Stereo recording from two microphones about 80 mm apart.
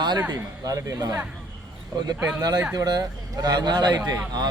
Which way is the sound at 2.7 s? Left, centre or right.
Right.